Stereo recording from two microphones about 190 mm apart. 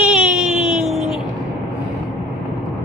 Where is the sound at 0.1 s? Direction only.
5° right (ahead or behind).